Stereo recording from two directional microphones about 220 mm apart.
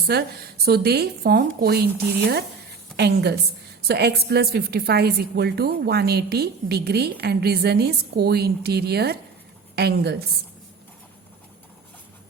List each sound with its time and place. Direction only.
0.1 s a woman's voice: 45° right (ahead or behind)
2.9 s a woman's voice: 45° right (ahead or behind)